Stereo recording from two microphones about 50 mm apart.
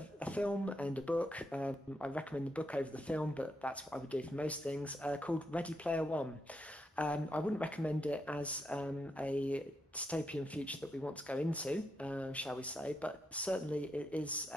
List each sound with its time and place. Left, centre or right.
0.2 s speech: left